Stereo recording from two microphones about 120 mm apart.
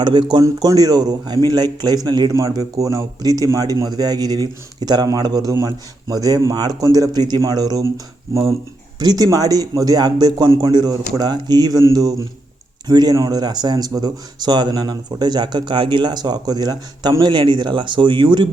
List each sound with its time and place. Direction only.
0.0 s speech: 40° right (ahead or behind)